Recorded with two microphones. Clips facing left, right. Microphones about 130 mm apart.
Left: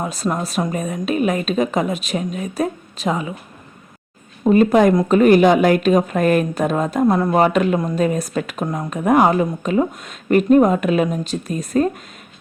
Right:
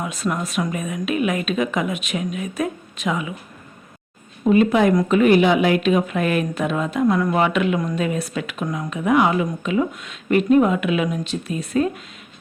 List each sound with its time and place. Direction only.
0.0 s a woman's voice: 35° left (ahead or behind)
4.4 s a woman's voice: 40° left (ahead or behind)